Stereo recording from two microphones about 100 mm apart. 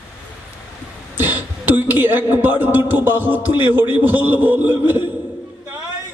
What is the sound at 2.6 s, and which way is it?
A man's voice, 15° right (ahead or behind).